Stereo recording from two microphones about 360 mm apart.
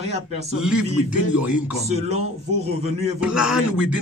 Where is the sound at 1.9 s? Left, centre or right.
Centre.